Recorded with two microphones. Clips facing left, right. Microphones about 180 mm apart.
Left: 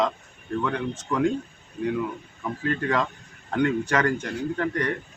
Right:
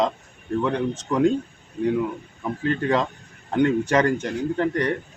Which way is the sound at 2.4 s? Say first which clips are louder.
Right 3 dB; 25° right (ahead or behind).